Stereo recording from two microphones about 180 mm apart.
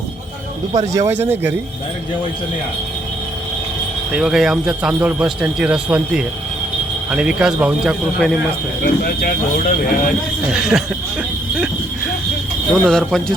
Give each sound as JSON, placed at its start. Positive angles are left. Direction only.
{"t": 0.7, "sound": "speech", "side_deg": -20}
{"t": 4.1, "sound": "speech", "side_deg": 0}
{"t": 8.8, "sound": "speech", "side_deg": 55}
{"t": 10.5, "sound": "speech", "side_deg": -5}
{"t": 12.8, "sound": "speech", "side_deg": 5}